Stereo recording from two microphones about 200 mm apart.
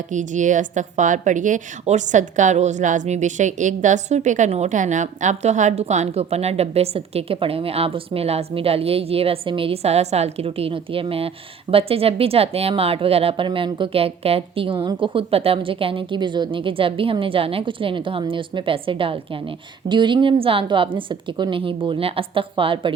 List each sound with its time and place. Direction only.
0.1 s speech: 40° right (ahead or behind)